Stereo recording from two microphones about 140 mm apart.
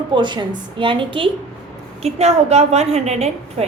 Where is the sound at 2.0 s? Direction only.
50° right (ahead or behind).